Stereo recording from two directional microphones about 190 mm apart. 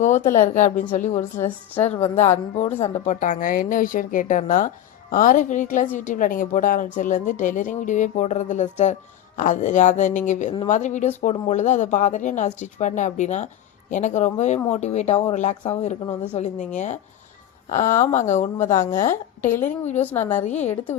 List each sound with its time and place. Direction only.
0.5 s a woman's voice: 40° left (ahead or behind)
1.4 s a woman's voice: 10° left (ahead or behind)
1.9 s a woman's voice: 35° left (ahead or behind)
20.0 s a woman's voice: 10° left (ahead or behind)
20.4 s a woman's voice: 35° left (ahead or behind)